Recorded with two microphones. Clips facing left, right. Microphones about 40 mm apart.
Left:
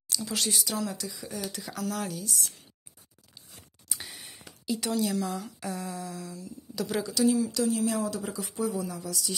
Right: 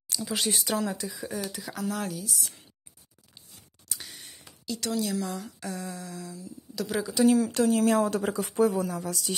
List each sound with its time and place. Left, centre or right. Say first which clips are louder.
0.1 s speech: right 1 dB; centre
0.5 s speech: right 5 dB; right
0.8 s speech: right 3 dB; right
1.1 s speech: right 2 dB; centre
3.9 s a sound: left 1 dB; centre
4.9 s speech: even; centre
7.2 s speech: right 4 dB; right